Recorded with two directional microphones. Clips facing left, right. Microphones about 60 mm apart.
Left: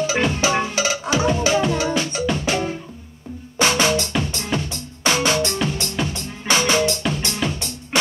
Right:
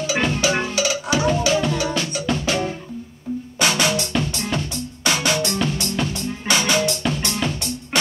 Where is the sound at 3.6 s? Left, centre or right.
Left.